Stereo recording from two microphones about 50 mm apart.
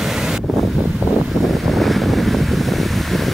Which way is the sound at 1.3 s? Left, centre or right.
Centre.